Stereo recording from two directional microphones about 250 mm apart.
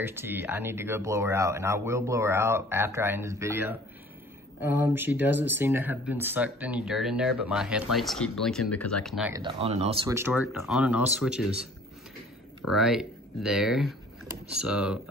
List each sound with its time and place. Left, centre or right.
0.0 s speech: centre
9.3 s speech: right
10.0 s speech: centre
12.7 s speech: centre